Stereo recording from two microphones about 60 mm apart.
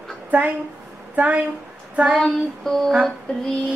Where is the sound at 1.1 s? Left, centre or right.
Right.